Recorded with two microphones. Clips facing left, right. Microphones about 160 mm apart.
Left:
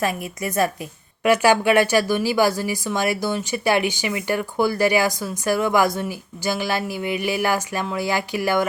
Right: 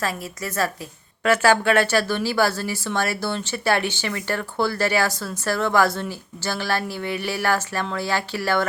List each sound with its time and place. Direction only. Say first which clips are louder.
0.0 s speech: left 3 dB; 15° left (ahead or behind)